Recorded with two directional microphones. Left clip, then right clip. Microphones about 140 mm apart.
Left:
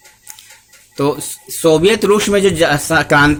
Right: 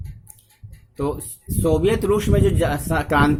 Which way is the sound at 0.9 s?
5° left (ahead or behind).